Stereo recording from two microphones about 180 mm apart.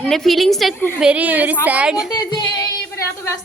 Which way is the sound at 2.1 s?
25° left (ahead or behind).